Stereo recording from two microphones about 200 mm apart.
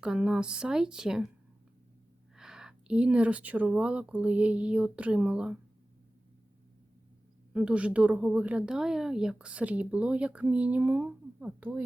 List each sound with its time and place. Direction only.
0.0 s a woman's voice: 5° right (ahead or behind)
2.3 s a woman's voice: 5° right (ahead or behind)
7.5 s a woman's voice: 5° right (ahead or behind)